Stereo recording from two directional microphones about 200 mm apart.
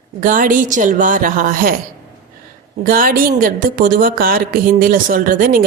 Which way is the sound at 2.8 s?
45° right (ahead or behind).